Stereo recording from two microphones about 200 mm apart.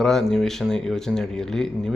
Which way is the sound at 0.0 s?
Centre (ahead or behind).